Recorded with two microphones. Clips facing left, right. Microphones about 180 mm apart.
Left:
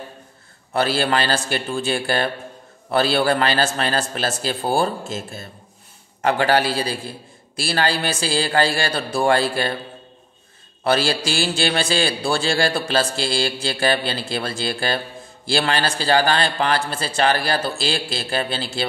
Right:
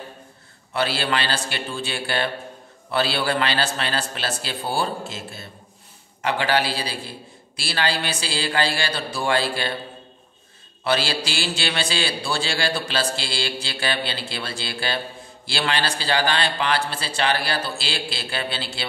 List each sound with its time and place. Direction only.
0.7 s a man's voice: 45° left (ahead or behind)
10.8 s a man's voice: 50° left (ahead or behind)